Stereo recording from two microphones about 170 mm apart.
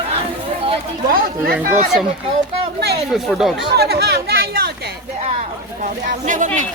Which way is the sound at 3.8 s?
65° right (ahead or behind).